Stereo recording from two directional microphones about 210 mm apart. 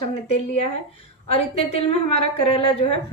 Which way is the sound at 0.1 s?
30° left (ahead or behind).